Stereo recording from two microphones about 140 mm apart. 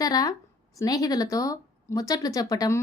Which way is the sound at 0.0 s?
25° left (ahead or behind).